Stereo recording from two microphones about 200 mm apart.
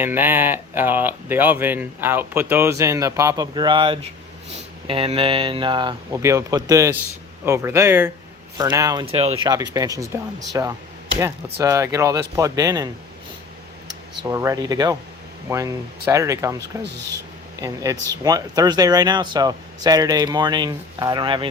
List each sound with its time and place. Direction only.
0.0 s speech: 10° right (ahead or behind)
9.0 s speech: 30° right (ahead or behind)
9.7 s speech: 15° right (ahead or behind)
14.3 s speech: 15° right (ahead or behind)
18.2 s speech: 20° right (ahead or behind)